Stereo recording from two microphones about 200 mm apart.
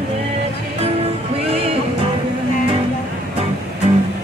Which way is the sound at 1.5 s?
30° right (ahead or behind).